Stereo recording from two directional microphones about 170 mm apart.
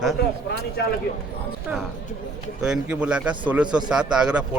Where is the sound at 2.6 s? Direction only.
5° right (ahead or behind).